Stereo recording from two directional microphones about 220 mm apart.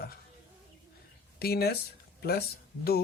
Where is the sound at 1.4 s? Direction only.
45° left (ahead or behind).